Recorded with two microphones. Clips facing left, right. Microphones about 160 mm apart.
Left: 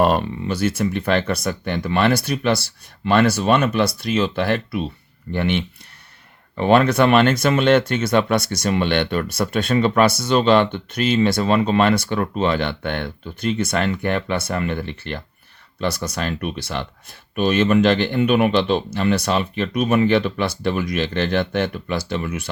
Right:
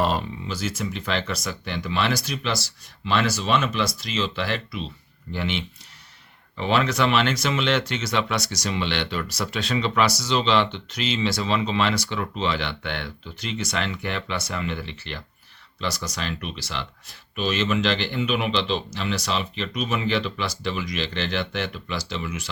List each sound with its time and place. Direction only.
0.0 s speech: 60° left (ahead or behind)